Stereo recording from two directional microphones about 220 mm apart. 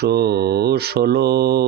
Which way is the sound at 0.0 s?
45° right (ahead or behind).